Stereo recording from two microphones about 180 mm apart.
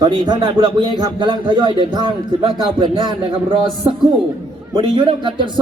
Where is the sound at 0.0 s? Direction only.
25° right (ahead or behind).